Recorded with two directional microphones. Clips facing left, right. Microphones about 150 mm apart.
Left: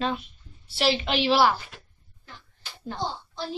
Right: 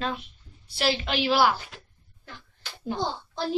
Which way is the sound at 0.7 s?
Centre (ahead or behind).